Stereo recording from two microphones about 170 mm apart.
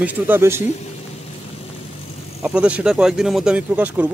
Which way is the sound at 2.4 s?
5° right (ahead or behind).